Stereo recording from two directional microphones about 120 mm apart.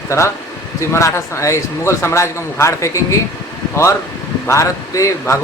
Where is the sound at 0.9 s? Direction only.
20° left (ahead or behind).